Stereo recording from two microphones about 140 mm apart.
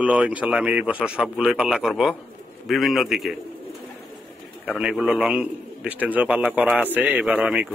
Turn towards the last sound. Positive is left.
turn(degrees=-10)  # may be behind; listen again after turning